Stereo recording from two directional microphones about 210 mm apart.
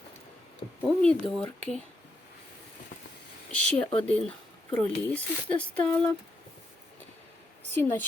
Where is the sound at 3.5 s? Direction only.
5° left (ahead or behind).